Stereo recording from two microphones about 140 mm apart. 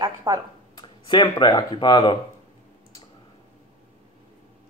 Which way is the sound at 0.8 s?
35° left (ahead or behind).